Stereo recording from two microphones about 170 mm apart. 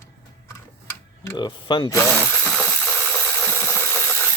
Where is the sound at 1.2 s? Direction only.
25° left (ahead or behind).